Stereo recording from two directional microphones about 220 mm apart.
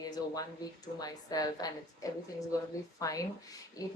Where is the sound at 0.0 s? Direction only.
15° left (ahead or behind).